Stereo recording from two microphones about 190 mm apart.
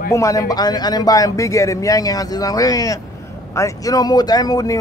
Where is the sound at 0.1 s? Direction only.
15° left (ahead or behind).